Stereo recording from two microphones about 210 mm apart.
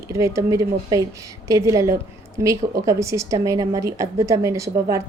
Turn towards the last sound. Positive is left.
turn(degrees=-15)  # may be behind; listen again after turning